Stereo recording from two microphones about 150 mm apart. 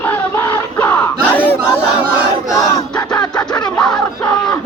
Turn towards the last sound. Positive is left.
turn(degrees=25)  # may be behind; listen again after turning